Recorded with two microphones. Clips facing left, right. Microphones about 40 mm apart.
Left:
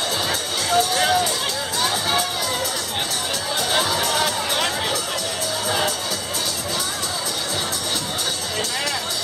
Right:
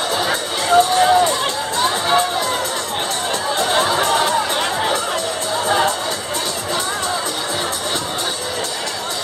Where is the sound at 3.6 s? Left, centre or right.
Right.